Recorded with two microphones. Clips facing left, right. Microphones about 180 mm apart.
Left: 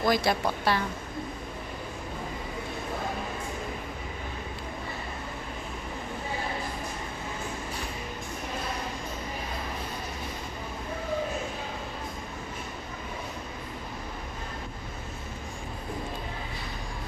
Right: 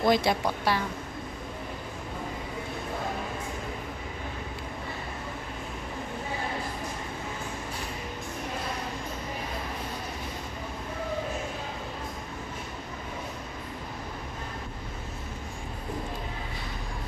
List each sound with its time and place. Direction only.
0.0 s a woman's voice: 20° right (ahead or behind)